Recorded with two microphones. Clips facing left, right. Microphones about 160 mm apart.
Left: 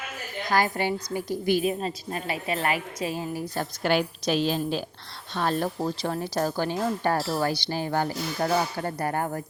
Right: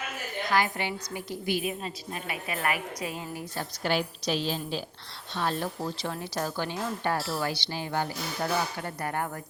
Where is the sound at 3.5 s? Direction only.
55° left (ahead or behind); by 9.4 s 35° left (ahead or behind).